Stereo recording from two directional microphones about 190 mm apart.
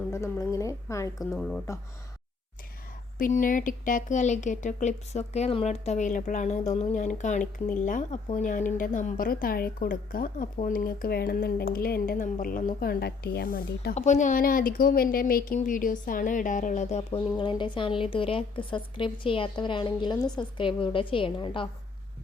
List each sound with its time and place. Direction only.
0.1 s a woman's voice: 15° left (ahead or behind)
1.4 s a woman's voice: 5° left (ahead or behind)
3.2 s a woman's voice: 45° left (ahead or behind)
17.3 s a woman's voice: 25° left (ahead or behind)